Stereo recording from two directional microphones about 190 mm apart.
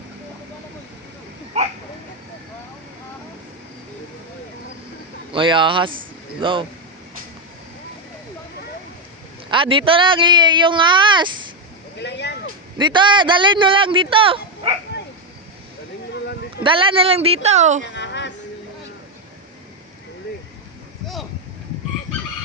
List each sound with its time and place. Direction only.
1.5 s a sound: 35° right (ahead or behind)
5.3 s a man's voice: 25° right (ahead or behind)
9.5 s a man's voice: 25° right (ahead or behind)
11.9 s a sound: 65° left (ahead or behind)
12.7 s a man's voice: 25° right (ahead or behind)
16.6 s speech: 25° right (ahead or behind)
17.9 s music: 65° left (ahead or behind)